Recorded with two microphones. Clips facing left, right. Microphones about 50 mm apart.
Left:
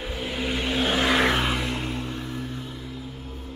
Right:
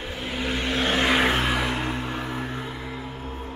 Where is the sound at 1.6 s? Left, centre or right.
Right.